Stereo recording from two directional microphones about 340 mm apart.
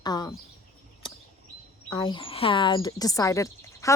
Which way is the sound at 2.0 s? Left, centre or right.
Centre.